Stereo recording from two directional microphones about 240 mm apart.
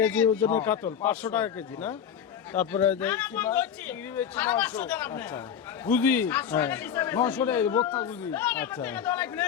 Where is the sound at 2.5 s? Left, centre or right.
Centre.